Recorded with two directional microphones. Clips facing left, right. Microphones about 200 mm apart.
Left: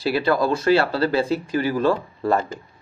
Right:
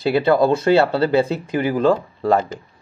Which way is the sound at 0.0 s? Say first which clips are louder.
Right 5 dB; 20° right (ahead or behind).